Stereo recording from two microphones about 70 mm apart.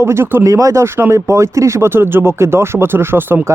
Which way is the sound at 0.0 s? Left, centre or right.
Right.